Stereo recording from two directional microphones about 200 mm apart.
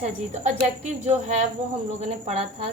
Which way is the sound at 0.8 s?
35° right (ahead or behind).